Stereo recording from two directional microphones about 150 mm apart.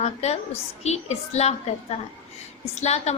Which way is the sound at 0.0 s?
45° left (ahead or behind).